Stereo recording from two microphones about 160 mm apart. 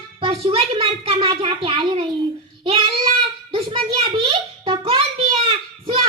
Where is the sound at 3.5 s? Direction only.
35° right (ahead or behind).